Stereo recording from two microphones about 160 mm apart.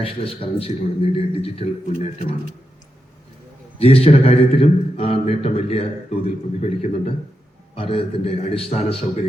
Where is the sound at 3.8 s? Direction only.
40° left (ahead or behind).